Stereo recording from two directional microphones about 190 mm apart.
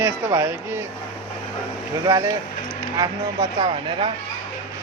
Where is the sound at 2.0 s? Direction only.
15° right (ahead or behind).